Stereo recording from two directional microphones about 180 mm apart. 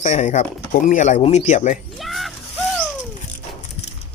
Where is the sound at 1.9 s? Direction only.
Centre (ahead or behind).